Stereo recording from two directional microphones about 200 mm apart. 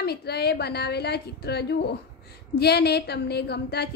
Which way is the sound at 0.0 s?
55° left (ahead or behind).